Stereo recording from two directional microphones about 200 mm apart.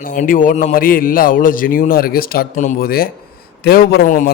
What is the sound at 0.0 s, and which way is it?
A man's voice, 45° left (ahead or behind).